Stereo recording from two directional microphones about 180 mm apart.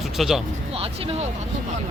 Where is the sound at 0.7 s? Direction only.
30° right (ahead or behind).